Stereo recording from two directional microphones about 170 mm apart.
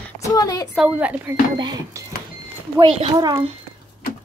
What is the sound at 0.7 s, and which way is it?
Speech, 5° right (ahead or behind).